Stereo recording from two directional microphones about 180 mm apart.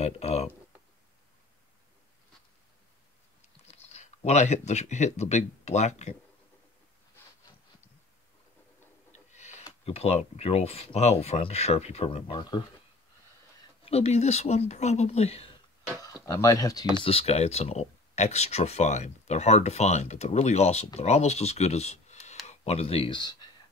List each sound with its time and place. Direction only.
0.0 s speech: 35° left (ahead or behind)
3.6 s speech: 35° left (ahead or behind)
9.1 s a sound: 40° left (ahead or behind)
9.8 s speech: 35° left (ahead or behind)
16.0 s speech: 20° left (ahead or behind)
16.9 s speech: 30° left (ahead or behind)